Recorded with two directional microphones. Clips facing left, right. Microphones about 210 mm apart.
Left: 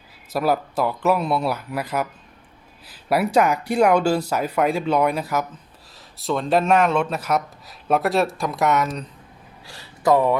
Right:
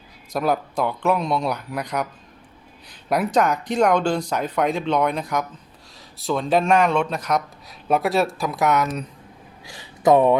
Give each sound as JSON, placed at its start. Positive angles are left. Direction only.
{"t": 0.3, "sound": "a man's voice", "side_deg": 5}
{"t": 9.6, "sound": "speech", "side_deg": -15}